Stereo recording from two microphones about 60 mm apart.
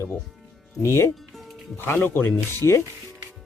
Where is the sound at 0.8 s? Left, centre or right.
Left.